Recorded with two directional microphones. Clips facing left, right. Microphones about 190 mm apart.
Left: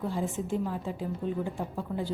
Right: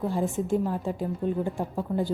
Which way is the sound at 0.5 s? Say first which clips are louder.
Right 5 dB; 50° right (ahead or behind).